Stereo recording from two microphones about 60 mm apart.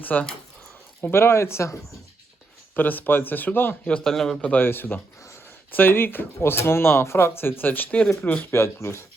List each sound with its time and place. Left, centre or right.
0.0 s speech: left
1.0 s speech: left
2.7 s speech: left
4.0 s a man's voice: centre
4.5 s speech: left
8.5 s speech: left